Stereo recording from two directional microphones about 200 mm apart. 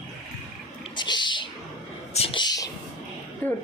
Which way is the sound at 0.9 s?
20° left (ahead or behind).